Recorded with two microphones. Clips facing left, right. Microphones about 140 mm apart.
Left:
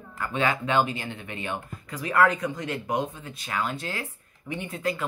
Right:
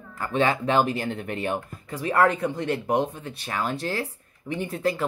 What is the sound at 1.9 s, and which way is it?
Speech, 30° right (ahead or behind).